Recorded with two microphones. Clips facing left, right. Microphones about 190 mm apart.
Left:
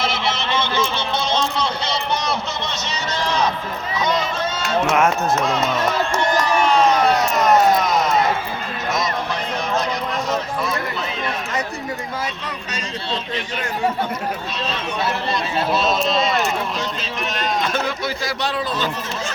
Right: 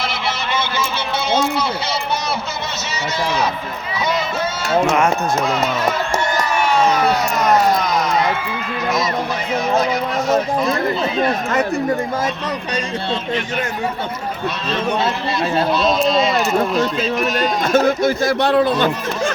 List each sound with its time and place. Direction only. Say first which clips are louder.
0.0 s a sound: left 1 dB; centre (ahead or behind)
4.9 s speech: right 1 dB; centre (ahead or behind)
6.6 s a sound: right 1 dB; 5° right (ahead or behind)
11.2 s speech: right 7 dB; 50° right (ahead or behind)
12.7 s speech: right 3 dB; 55° right (ahead or behind)
15.5 s speech: right 3 dB; centre (ahead or behind)
16.6 s speech: right 8 dB; 50° right (ahead or behind)
17.2 s speech: right 5 dB; centre (ahead or behind)
17.6 s speech: right 8 dB; 45° right (ahead or behind)